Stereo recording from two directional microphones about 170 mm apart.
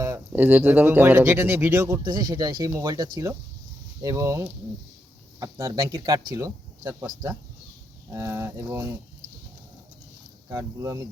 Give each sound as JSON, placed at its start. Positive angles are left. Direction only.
{"t": 0.0, "sound": "speech", "side_deg": -15}
{"t": 10.5, "sound": "speech", "side_deg": -20}